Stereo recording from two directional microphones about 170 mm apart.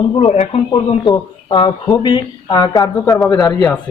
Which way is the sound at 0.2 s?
40° left (ahead or behind).